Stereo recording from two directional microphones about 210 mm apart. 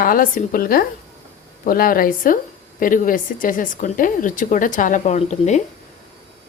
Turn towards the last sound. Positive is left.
turn(degrees=35)  # may be behind; listen again after turning